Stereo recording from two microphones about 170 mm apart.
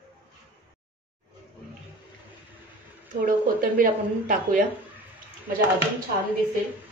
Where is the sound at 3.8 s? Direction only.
50° right (ahead or behind).